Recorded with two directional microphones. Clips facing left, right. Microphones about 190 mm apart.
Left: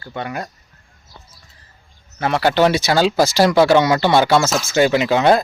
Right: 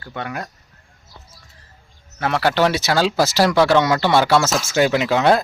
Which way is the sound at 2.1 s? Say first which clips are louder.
Left 2 dB; centre (ahead or behind).